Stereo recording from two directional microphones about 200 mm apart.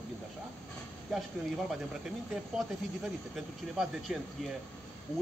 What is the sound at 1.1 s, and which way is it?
Speech, centre (ahead or behind).